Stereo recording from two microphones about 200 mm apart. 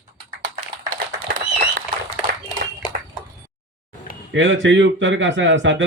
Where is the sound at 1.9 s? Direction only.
25° right (ahead or behind).